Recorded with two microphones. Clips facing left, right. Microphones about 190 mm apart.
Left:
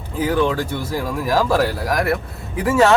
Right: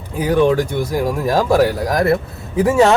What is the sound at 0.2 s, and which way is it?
Speech, 15° right (ahead or behind).